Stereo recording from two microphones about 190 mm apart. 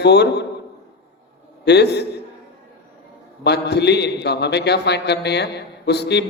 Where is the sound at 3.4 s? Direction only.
60° left (ahead or behind).